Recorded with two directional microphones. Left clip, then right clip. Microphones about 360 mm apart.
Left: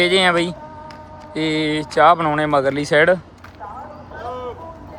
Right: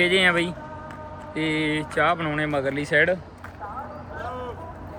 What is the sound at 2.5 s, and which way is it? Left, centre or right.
Speech, left.